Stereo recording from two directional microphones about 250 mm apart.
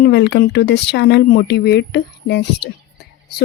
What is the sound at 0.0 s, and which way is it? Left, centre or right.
Speech, left.